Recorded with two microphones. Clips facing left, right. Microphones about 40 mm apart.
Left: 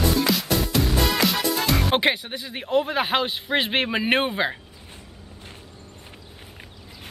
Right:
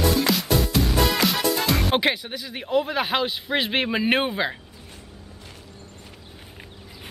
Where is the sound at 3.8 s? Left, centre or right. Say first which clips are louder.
Even; centre.